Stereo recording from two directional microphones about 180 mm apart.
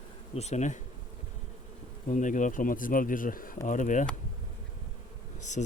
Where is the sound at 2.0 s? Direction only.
45° left (ahead or behind).